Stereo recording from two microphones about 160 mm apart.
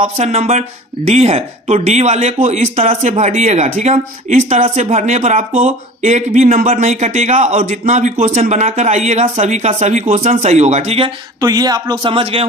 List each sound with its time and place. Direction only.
0.0 s speech: 45° right (ahead or behind)
11.3 s a man's voice: 25° right (ahead or behind)